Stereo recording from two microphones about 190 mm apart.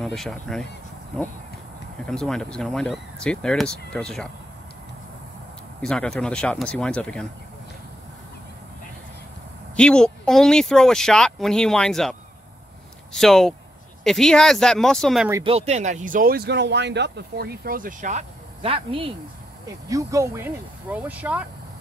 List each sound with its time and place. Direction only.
0.0 s speech: centre (ahead or behind)
2.0 s speech: 5° left (ahead or behind)
5.8 s speech: 5° left (ahead or behind)
9.8 s speech: 5° left (ahead or behind)
15.4 s speech: 35° right (ahead or behind)
19.9 s speech: 15° right (ahead or behind)